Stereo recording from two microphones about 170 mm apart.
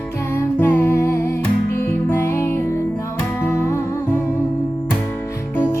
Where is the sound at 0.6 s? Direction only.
10° left (ahead or behind).